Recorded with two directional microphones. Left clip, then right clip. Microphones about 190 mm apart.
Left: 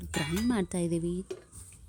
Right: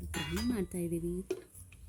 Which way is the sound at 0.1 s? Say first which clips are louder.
Left 5 dB; 25° left (ahead or behind).